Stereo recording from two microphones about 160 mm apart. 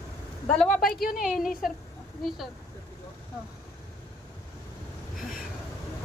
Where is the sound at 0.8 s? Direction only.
65° left (ahead or behind).